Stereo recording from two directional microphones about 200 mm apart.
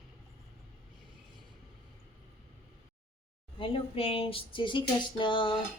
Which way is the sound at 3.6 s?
30° left (ahead or behind).